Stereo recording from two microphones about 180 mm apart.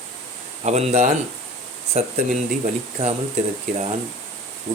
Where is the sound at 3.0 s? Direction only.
35° right (ahead or behind).